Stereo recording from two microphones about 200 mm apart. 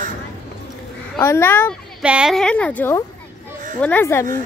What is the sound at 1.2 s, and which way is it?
Speech, 10° left (ahead or behind).